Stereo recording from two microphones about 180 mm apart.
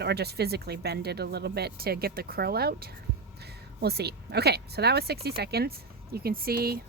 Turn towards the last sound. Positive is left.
turn(degrees=-55)  # may be behind; listen again after turning